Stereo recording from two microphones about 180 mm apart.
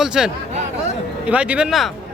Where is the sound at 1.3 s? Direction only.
5° right (ahead or behind).